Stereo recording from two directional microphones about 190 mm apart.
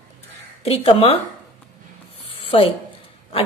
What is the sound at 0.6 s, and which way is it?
Speech, 30° left (ahead or behind).